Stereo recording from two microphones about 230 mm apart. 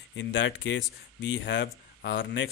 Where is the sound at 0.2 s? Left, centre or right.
Left.